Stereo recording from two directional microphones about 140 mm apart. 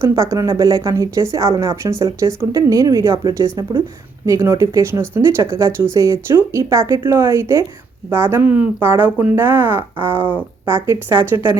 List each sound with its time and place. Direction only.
0.0 s speech: 20° right (ahead or behind)